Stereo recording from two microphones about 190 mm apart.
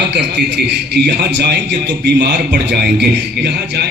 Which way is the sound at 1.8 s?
65° right (ahead or behind).